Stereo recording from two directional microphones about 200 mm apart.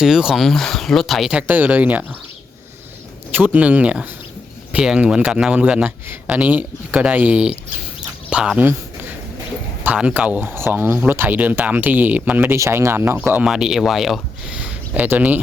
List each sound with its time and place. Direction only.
0.0 s speech: centre (ahead or behind)
3.3 s speech: 5° right (ahead or behind)